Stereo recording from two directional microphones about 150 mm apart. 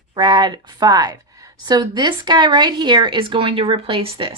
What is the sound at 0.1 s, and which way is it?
A woman's voice, 30° right (ahead or behind).